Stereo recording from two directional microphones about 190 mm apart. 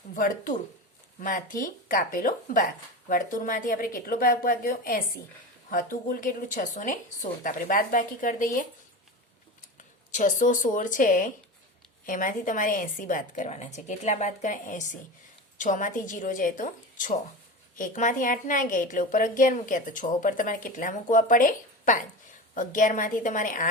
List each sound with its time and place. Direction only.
0.1 s a woman's voice: 45° left (ahead or behind)
10.1 s a woman's voice: 40° left (ahead or behind)